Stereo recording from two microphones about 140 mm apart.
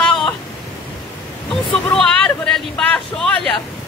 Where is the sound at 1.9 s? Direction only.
5° left (ahead or behind).